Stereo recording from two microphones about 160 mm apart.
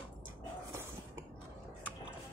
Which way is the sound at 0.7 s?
15° right (ahead or behind).